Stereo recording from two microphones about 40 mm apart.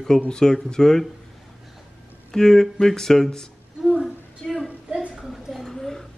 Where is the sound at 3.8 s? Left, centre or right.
Centre.